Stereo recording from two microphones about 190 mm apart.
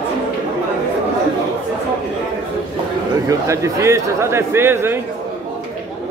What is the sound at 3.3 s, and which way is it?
A man's voice, 15° right (ahead or behind).